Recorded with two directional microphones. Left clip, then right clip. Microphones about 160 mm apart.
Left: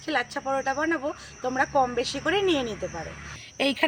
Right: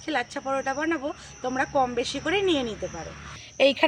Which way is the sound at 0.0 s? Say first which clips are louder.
Left 1 dB; 10° right (ahead or behind).